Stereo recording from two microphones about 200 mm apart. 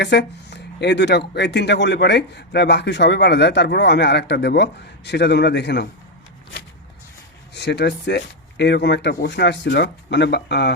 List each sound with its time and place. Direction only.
0.0 s speech: 60° left (ahead or behind)
7.5 s speech: 60° left (ahead or behind)